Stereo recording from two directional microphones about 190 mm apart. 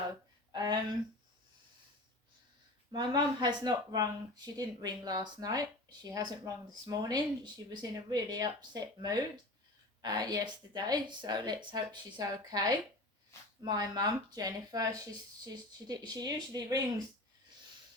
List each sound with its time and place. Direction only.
0.5 s speech: 25° right (ahead or behind)
2.9 s speech: 20° right (ahead or behind)